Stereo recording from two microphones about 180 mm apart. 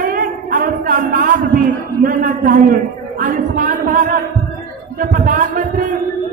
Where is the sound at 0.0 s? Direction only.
50° right (ahead or behind).